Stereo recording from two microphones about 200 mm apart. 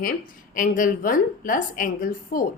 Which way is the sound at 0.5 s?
40° left (ahead or behind).